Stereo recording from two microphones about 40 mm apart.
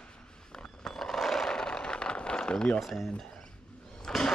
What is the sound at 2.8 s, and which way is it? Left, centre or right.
Speech, centre.